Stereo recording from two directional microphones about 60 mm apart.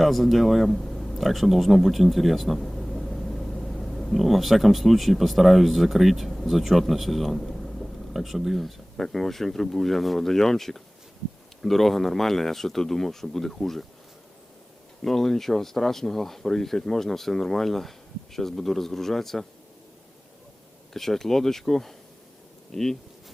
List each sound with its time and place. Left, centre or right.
0.0 s a sound: centre
4.1 s speech: centre
15.0 s speech: centre
20.9 s speech: centre